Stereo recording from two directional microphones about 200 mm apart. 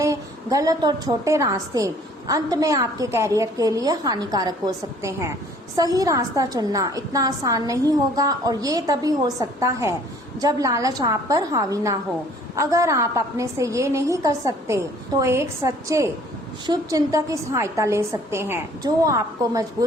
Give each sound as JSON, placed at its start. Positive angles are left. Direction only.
{"t": 0.0, "sound": "a woman's voice", "side_deg": -15}